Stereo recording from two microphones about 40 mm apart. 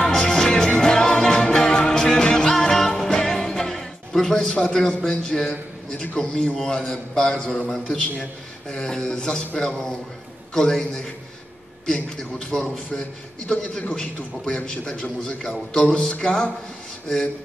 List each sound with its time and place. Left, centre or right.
0.2 s music: centre
3.5 s a sound: centre
4.7 s a man's voice: centre
7.6 s a man's voice: centre